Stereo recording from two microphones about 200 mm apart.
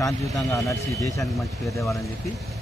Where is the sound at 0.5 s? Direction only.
15° left (ahead or behind).